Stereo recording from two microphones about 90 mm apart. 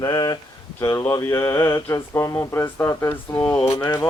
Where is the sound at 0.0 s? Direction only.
45° left (ahead or behind).